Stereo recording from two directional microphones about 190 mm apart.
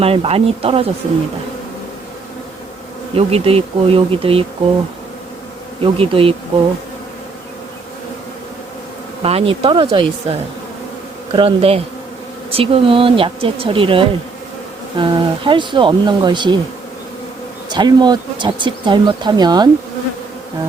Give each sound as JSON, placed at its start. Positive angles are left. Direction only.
{"t": 0.0, "sound": "bee", "side_deg": -30}
{"t": 3.2, "sound": "bee", "side_deg": -30}
{"t": 5.8, "sound": "speech", "side_deg": -30}
{"t": 9.2, "sound": "speech", "side_deg": -30}
{"t": 17.7, "sound": "speech", "side_deg": -20}